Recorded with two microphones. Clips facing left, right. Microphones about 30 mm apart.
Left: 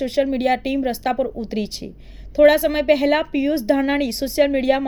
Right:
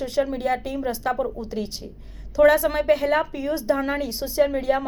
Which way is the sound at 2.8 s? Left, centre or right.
Left.